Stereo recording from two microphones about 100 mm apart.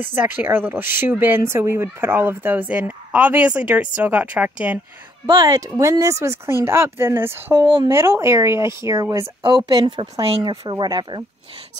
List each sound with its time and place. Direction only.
0.1 s speech: 20° right (ahead or behind)
5.4 s speech: 35° right (ahead or behind)
9.4 s speech: 45° right (ahead or behind)